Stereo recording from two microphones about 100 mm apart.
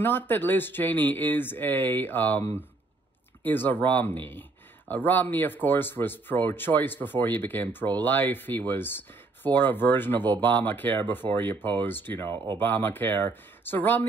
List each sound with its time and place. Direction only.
0.0 s speech: 20° left (ahead or behind)
3.4 s speech: 20° left (ahead or behind)